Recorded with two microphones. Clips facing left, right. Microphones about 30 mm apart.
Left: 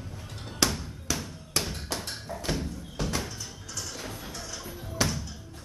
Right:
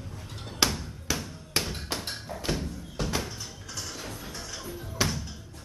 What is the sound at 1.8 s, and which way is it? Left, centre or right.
Thump, centre.